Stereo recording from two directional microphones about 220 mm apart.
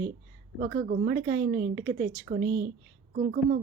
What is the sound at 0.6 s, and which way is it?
Speech, 45° right (ahead or behind).